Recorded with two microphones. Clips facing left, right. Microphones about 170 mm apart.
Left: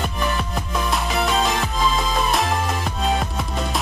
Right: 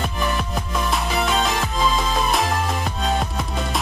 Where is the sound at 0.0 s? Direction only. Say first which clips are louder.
Even; centre (ahead or behind).